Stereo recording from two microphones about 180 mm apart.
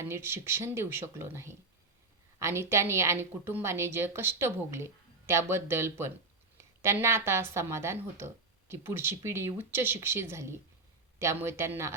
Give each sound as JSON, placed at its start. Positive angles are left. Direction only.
{"t": 0.0, "sound": "a woman's voice", "side_deg": -15}